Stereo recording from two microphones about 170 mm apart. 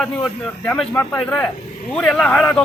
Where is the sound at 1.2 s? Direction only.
5° left (ahead or behind).